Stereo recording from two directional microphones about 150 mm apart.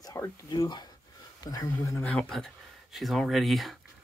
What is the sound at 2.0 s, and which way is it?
Speech, 10° left (ahead or behind).